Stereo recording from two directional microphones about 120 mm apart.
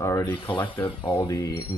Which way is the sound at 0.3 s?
45° left (ahead or behind).